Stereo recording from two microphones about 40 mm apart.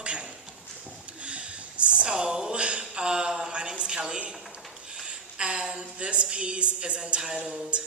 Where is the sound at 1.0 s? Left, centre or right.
Right.